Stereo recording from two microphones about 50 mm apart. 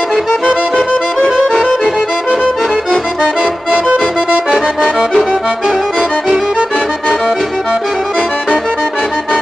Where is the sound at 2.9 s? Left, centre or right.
Centre.